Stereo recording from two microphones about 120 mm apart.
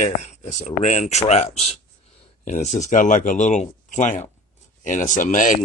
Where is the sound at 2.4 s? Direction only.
80° left.